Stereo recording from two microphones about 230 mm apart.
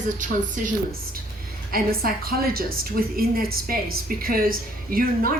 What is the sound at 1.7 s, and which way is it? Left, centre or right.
A woman's voice, right.